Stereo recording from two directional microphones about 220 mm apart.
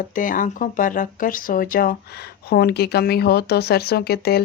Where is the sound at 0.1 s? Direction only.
35° left (ahead or behind).